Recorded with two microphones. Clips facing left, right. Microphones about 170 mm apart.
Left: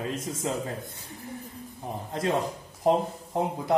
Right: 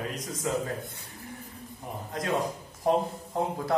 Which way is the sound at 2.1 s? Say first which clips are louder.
Left 2 dB; 30° left (ahead or behind).